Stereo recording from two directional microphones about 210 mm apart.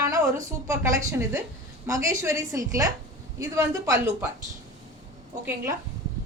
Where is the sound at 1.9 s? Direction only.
15° right (ahead or behind).